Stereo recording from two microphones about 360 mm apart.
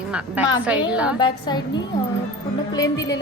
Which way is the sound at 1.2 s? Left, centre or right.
Centre.